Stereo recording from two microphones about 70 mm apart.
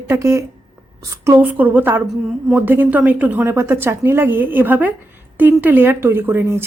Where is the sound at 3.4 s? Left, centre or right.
Right.